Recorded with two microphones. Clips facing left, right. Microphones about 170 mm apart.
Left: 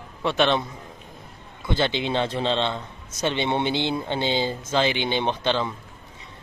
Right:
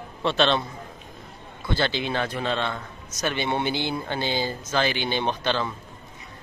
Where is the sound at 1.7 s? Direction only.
20° left (ahead or behind).